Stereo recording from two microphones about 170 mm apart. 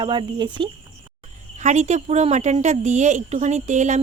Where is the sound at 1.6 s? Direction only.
45° right (ahead or behind).